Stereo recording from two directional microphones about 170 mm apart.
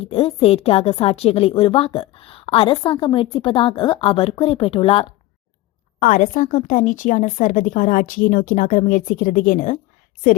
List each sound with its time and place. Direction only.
0.1 s a woman's voice: 35° left (ahead or behind)
6.0 s speech: 50° left (ahead or behind)